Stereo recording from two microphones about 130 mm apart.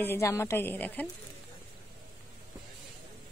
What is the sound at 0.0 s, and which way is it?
A woman's voice, 20° left (ahead or behind).